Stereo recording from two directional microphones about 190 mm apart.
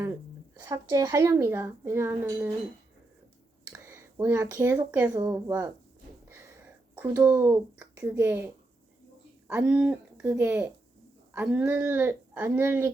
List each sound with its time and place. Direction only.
0.6 s speech: 15° right (ahead or behind)
3.7 s speech: 15° right (ahead or behind)
7.0 s speech: 10° right (ahead or behind)
9.5 s speech: 5° right (ahead or behind)